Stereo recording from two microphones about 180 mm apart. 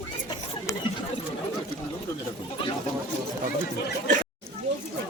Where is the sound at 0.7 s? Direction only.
15° left (ahead or behind).